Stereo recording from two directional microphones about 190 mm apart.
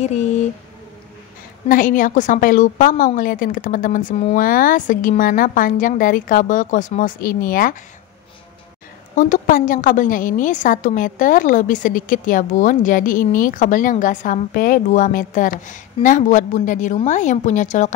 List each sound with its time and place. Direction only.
0.0 s speech: 35° left (ahead or behind)
1.7 s a woman's voice: 45° left (ahead or behind)
9.1 s a woman's voice: 45° left (ahead or behind)